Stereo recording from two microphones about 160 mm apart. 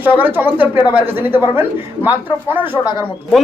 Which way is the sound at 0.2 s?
10° right (ahead or behind).